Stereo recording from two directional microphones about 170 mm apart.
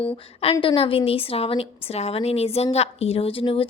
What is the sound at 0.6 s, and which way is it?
A woman's voice, 30° left (ahead or behind).